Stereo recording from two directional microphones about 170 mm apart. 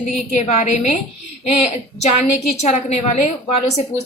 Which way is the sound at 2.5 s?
40° left (ahead or behind).